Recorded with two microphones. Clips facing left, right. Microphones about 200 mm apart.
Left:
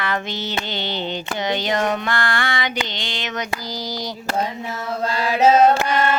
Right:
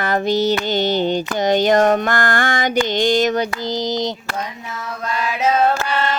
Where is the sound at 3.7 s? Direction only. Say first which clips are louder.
Right 8 dB; 20° right (ahead or behind).